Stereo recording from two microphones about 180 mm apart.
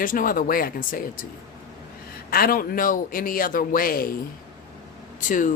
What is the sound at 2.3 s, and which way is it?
Speech, 55° left (ahead or behind).